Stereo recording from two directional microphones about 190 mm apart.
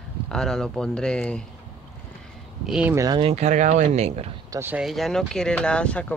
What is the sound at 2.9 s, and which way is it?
Speech, 15° right (ahead or behind).